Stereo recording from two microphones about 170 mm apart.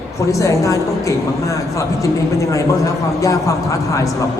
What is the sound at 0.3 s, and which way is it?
A man's voice, 20° left (ahead or behind).